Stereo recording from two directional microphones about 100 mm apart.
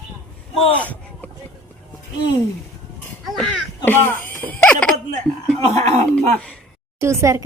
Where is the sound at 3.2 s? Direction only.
Centre (ahead or behind).